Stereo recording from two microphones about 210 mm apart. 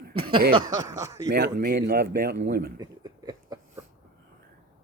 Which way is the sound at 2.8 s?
20° right (ahead or behind).